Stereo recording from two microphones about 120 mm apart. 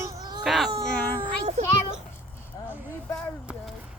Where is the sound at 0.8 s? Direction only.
10° left (ahead or behind).